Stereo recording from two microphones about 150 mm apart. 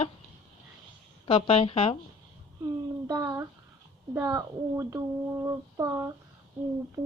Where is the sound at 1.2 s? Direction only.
40° left (ahead or behind).